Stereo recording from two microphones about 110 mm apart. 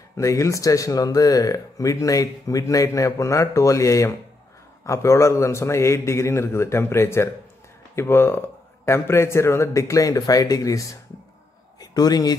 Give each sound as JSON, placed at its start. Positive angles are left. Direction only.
{"t": 0.2, "sound": "a man's voice", "side_deg": 30}